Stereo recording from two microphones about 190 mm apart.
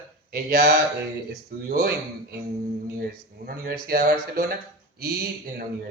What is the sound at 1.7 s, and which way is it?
Speech, 55° right (ahead or behind).